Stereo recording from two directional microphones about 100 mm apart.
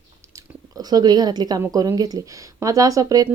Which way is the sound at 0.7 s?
40° right (ahead or behind).